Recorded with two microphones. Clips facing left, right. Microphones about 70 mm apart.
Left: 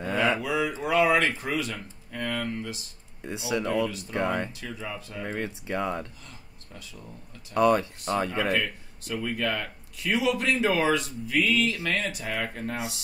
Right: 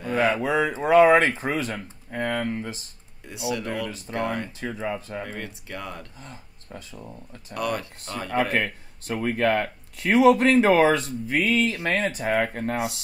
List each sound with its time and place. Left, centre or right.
0.1 s speech: right
3.3 s speech: left
4.5 s speech: right
5.2 s speech: left
6.2 s speech: right
7.5 s speech: left
8.3 s speech: right